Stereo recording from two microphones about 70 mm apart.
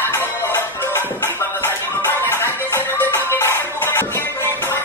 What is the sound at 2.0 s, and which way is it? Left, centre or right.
Music, left.